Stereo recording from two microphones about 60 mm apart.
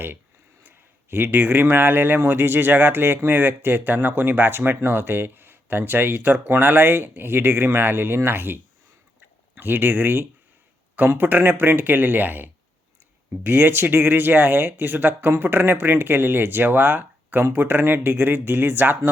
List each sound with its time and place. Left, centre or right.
1.1 s speech: right
9.6 s speech: right